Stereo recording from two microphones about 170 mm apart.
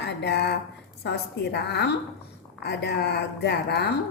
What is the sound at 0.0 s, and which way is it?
A woman's voice, 85° left.